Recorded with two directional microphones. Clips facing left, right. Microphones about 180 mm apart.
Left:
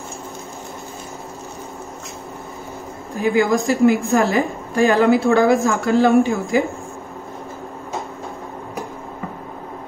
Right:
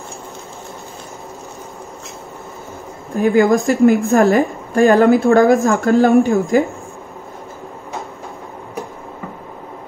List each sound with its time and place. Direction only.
3.2 s speech: 55° right (ahead or behind)
3.6 s a woman's voice: centre (ahead or behind)
4.3 s a woman's voice: 50° right (ahead or behind)